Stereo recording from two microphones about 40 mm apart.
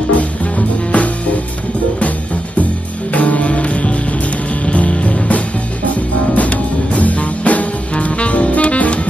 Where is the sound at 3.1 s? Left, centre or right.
Left.